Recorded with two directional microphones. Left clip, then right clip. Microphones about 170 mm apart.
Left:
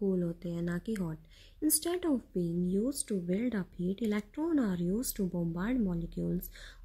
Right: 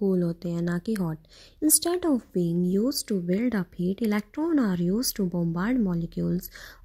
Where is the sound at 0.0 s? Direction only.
30° right (ahead or behind).